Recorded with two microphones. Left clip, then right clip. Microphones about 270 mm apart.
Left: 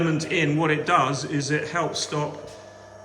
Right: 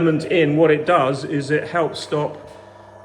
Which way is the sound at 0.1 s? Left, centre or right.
Centre.